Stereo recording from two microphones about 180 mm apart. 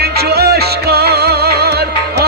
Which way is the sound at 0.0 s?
60° right (ahead or behind).